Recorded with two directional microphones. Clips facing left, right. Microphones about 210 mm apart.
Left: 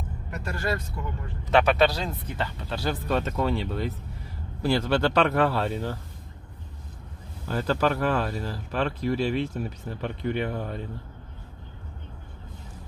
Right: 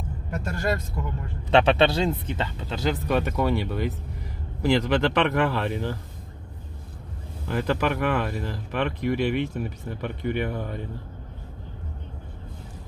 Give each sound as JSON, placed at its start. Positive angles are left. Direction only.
{"t": 0.3, "sound": "vehicle", "side_deg": -45}
{"t": 1.5, "sound": "speech", "side_deg": -25}
{"t": 7.4, "sound": "speech", "side_deg": -15}